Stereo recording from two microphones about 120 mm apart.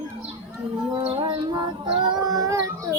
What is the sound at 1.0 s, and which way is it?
Child singing, 40° right (ahead or behind).